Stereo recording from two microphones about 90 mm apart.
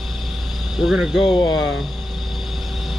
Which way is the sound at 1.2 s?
60° left (ahead or behind).